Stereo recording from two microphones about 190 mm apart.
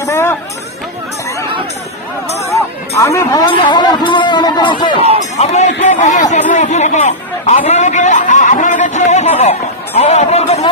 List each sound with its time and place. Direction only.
0.0 s hubbub: 15° left (ahead or behind)
3.0 s speech: 15° left (ahead or behind)
5.4 s a man's voice: 35° left (ahead or behind)